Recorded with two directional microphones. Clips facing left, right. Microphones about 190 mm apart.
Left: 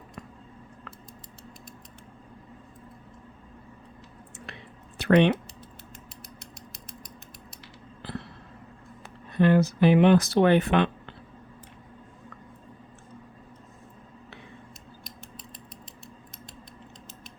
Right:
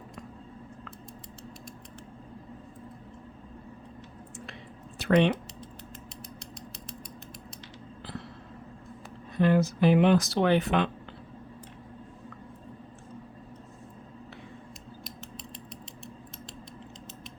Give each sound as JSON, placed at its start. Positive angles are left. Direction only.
{"t": 5.0, "sound": "speech", "side_deg": 65}
{"t": 9.3, "sound": "speech", "side_deg": 65}